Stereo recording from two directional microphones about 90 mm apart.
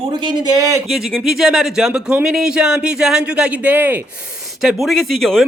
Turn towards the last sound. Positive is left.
turn(degrees=5)  # may be behind; listen again after turning